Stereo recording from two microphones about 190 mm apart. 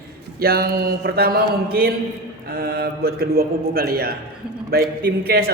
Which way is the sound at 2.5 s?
55° right (ahead or behind).